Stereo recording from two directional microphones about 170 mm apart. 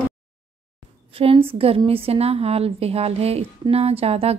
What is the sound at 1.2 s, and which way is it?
A woman's voice, 35° right (ahead or behind).